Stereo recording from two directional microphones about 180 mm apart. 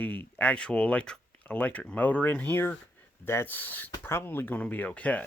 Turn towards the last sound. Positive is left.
turn(degrees=10)  # may be behind; listen again after turning